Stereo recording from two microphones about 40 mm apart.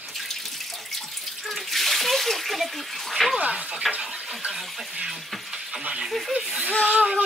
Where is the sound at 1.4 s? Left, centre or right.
Centre.